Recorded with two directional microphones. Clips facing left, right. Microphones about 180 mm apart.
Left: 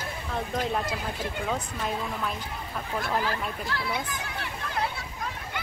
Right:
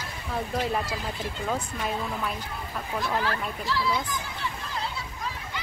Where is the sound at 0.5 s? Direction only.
5° right (ahead or behind).